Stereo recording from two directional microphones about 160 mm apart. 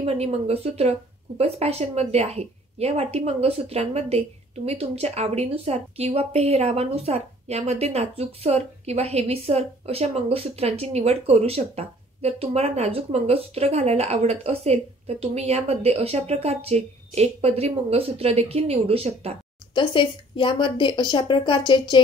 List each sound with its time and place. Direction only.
0.0 s a woman's voice: 40° right (ahead or behind)
19.7 s speech: 30° left (ahead or behind)